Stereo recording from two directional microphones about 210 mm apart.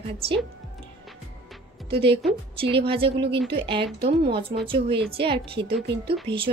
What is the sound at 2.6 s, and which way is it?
Speech, 25° right (ahead or behind).